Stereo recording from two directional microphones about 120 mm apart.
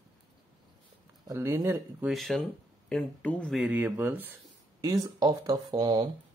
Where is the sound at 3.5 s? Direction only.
15° right (ahead or behind).